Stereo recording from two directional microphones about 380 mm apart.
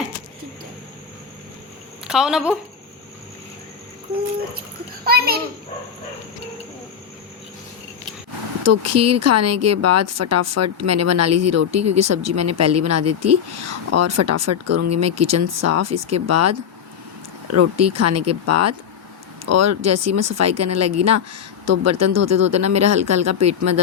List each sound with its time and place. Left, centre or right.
2.0 s speech: centre
5.0 s a child's voice: right
8.6 s speech: right